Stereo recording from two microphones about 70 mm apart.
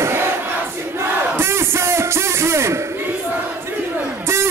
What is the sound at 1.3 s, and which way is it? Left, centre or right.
Music, right.